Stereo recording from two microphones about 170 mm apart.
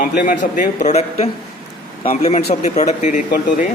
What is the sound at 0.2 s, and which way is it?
Speech, 55° left (ahead or behind).